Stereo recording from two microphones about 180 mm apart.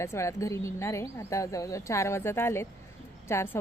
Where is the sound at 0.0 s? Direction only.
15° left (ahead or behind).